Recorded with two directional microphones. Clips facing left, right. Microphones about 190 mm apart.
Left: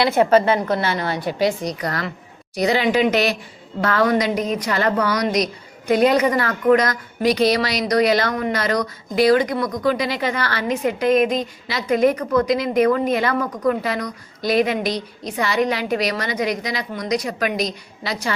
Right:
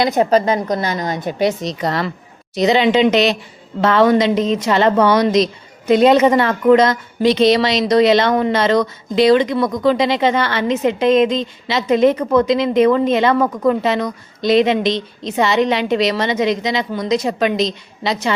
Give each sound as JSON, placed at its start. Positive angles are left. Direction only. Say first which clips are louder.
{"t": 0.2, "sound": "a woman's voice", "louder": "left 1 dB", "side_deg": -35}
{"t": 0.9, "sound": "a woman's voice", "louder": "right 2 dB", "side_deg": -15}